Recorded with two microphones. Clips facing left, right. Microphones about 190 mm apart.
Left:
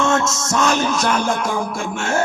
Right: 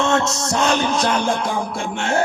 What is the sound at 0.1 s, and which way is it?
A man's voice, 35° right (ahead or behind).